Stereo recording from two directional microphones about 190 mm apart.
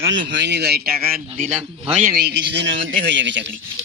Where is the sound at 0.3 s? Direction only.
65° right (ahead or behind); by 1.5 s 50° right (ahead or behind).